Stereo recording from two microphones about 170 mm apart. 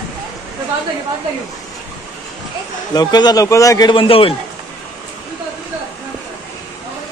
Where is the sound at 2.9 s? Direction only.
25° left (ahead or behind).